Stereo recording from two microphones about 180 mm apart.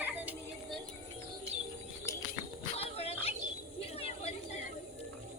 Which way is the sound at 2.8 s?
35° left (ahead or behind).